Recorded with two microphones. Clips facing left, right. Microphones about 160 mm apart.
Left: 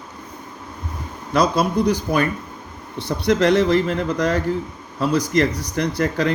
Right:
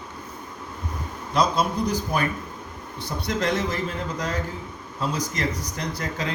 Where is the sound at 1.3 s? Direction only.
70° left (ahead or behind).